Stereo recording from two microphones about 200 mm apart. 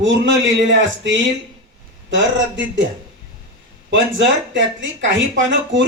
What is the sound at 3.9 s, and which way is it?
A man's voice, 65° right (ahead or behind).